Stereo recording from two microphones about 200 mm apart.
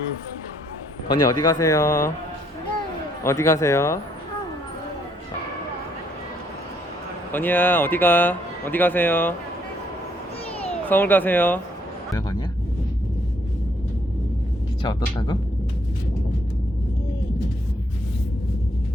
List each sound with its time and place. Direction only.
1.0 s speech: 20° left (ahead or behind)
3.2 s speech: 15° left (ahead or behind)
7.3 s speech: 10° left (ahead or behind)
10.8 s speech: 10° left (ahead or behind)
15.1 s speech: 20° left (ahead or behind)